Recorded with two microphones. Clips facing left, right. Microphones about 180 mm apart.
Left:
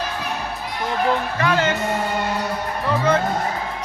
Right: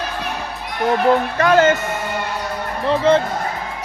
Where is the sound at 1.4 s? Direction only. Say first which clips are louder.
Right 7 dB; 45° right (ahead or behind).